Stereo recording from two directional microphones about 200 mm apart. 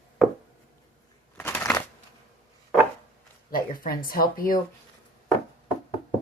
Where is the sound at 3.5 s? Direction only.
45° left (ahead or behind).